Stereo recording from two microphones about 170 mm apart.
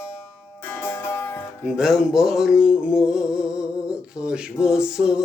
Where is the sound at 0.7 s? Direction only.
15° left (ahead or behind).